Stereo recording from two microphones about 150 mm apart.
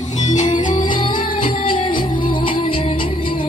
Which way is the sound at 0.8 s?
35° left (ahead or behind).